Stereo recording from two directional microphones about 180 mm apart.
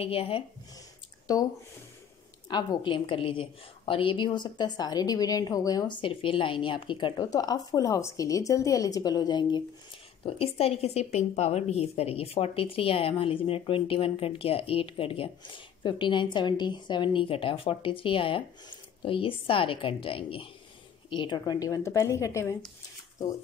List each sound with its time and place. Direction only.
0.0 s speech: 30° left (ahead or behind)
2.4 s a woman's voice: 25° left (ahead or behind)